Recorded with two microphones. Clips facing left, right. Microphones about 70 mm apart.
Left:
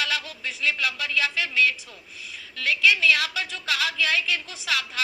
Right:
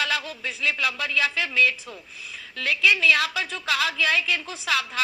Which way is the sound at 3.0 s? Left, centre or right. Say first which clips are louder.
Right 1 dB; right.